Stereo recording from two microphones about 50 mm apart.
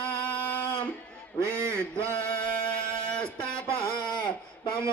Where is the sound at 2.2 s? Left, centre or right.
Left.